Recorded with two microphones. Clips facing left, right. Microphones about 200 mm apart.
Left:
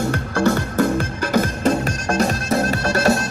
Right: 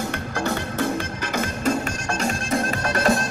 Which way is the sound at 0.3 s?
45° left (ahead or behind).